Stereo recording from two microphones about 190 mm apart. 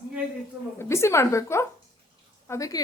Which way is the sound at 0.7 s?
15° left (ahead or behind).